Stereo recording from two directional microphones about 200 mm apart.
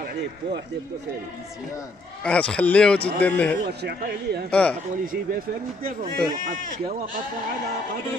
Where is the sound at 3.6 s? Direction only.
55° right (ahead or behind).